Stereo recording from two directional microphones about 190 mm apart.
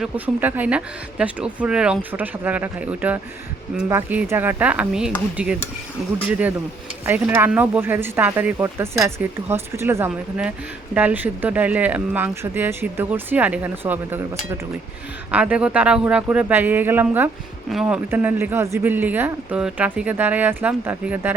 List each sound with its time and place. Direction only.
0.0 s speech: 10° right (ahead or behind)
7.0 s speech: 10° right (ahead or behind)
15.3 s speech: 5° right (ahead or behind)